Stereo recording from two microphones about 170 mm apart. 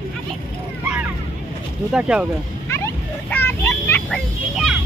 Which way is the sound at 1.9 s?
5° right (ahead or behind).